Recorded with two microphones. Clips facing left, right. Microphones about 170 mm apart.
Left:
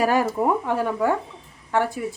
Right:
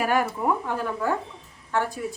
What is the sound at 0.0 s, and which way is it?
Speech, 35° left (ahead or behind).